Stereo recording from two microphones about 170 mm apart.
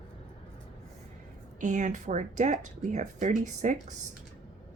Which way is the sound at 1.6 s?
45° right (ahead or behind).